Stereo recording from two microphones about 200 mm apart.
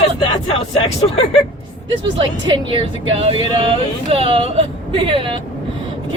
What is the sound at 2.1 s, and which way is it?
A woman's voice, 25° right (ahead or behind).